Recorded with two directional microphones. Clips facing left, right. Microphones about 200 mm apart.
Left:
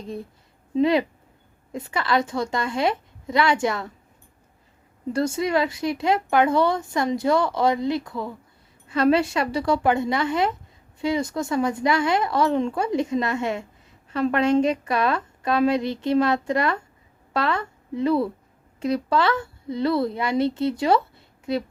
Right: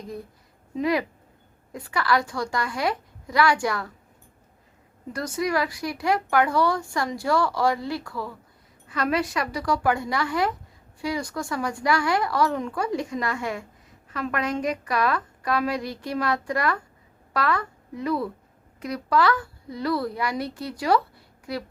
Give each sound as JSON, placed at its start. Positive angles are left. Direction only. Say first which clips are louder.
{"t": 0.8, "sound": "speech", "louder": "left 5 dB", "side_deg": 25}
{"t": 5.1, "sound": "a woman's voice", "louder": "left 4 dB", "side_deg": 25}